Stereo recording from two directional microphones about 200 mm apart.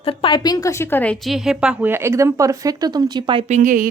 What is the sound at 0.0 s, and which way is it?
A woman's voice, 25° left (ahead or behind).